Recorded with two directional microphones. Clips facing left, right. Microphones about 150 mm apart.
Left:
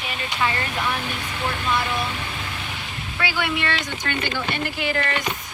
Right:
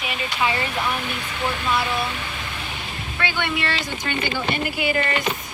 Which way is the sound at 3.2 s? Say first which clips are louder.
Even; 5° left (ahead or behind).